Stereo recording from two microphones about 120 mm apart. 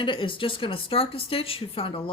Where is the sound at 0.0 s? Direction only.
45° left (ahead or behind).